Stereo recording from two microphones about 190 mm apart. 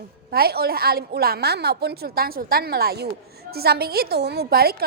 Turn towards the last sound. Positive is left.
turn(degrees=-55)  # may be behind; listen again after turning